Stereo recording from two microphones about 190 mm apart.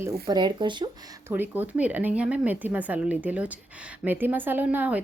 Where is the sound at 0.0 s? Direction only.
20° right (ahead or behind).